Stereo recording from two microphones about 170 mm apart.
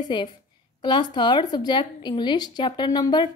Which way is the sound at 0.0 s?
25° left (ahead or behind).